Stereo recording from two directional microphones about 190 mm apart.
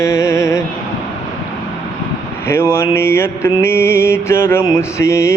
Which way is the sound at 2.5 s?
15° left (ahead or behind).